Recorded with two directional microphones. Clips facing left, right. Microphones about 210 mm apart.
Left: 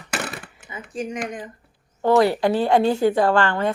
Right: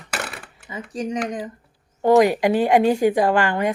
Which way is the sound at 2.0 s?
15° right (ahead or behind).